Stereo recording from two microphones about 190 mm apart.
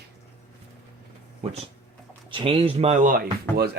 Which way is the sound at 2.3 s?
30° right (ahead or behind).